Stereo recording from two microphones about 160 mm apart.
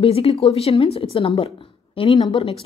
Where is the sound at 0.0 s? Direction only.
35° left (ahead or behind).